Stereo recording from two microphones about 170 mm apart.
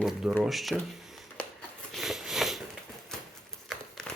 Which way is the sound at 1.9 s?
Centre (ahead or behind).